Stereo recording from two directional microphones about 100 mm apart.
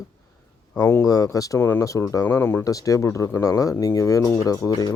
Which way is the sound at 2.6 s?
35° left (ahead or behind).